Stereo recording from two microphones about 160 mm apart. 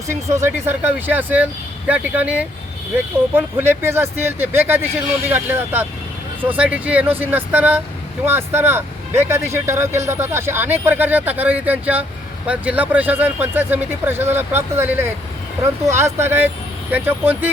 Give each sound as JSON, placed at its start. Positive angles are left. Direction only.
{"t": 0.1, "sound": "speech", "side_deg": -15}